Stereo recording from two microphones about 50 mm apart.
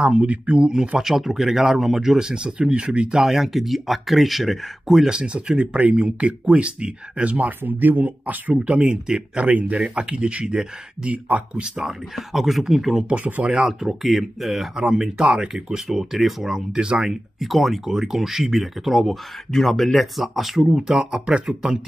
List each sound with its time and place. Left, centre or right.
0.0 s speech: right
0.7 s speech: centre
3.2 s speech: centre
5.1 s speech: centre; by 8.5 s right
8.5 s speech: right
9.5 s speech: right
9.8 s speech: centre
11.2 s speech: right
11.6 s speech: centre
13.1 s speech: right
13.6 s speech: centre